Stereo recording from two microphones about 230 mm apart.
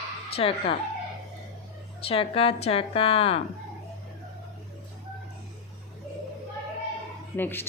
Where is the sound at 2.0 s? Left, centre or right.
Left.